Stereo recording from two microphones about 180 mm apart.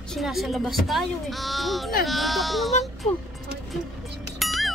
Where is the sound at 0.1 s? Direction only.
Centre (ahead or behind).